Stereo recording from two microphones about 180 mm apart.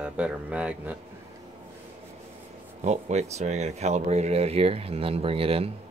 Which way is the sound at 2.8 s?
40° right (ahead or behind).